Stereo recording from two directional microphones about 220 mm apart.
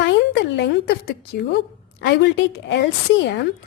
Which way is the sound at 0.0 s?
50° left (ahead or behind).